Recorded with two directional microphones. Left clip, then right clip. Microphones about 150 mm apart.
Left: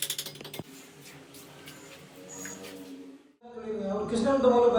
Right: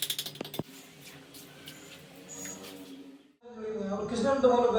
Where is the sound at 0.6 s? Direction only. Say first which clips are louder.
Right 4 dB; 25° right (ahead or behind).